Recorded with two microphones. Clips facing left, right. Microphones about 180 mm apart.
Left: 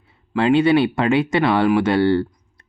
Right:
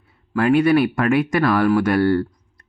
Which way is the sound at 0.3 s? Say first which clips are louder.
Even; 25° left (ahead or behind).